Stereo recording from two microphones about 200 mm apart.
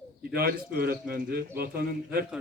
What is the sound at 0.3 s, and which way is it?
A man's voice, 50° right (ahead or behind).